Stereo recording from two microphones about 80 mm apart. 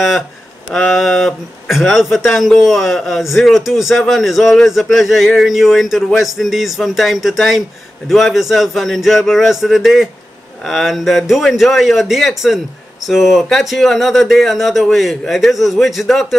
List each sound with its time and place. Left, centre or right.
0.7 s speech: centre